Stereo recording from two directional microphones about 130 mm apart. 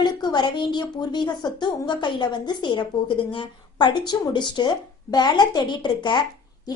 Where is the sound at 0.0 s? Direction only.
35° left (ahead or behind).